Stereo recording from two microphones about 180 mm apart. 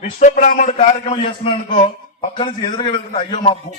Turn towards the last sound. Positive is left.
turn(degrees=30)  # may be behind; listen again after turning